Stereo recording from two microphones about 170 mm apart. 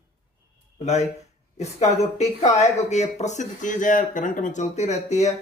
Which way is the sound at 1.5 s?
40° left (ahead or behind).